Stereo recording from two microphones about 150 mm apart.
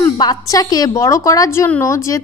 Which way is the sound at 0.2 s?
25° left (ahead or behind).